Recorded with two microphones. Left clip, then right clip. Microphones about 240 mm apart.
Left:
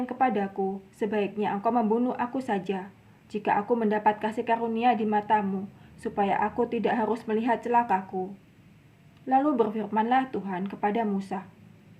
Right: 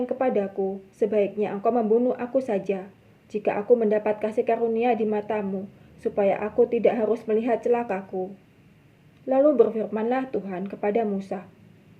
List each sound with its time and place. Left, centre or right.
0.0 s speech: centre
9.3 s speech: centre